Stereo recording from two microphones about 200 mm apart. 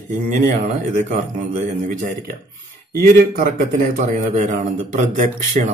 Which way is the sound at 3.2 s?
40° right (ahead or behind).